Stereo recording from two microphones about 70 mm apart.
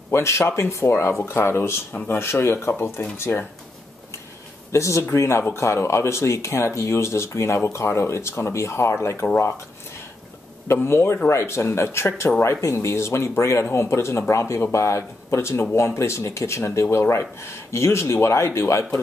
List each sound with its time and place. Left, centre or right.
0.1 s speech: left
4.7 s speech: left
10.7 s speech: left